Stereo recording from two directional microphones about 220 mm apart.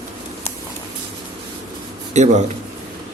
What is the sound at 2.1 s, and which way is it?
Speech, 30° right (ahead or behind).